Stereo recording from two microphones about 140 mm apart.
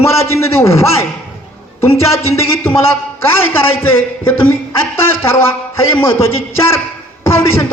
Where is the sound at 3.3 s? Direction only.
15° left (ahead or behind).